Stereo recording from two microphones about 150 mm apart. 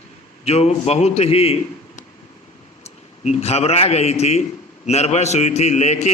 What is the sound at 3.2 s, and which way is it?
A man's voice, 45° left (ahead or behind).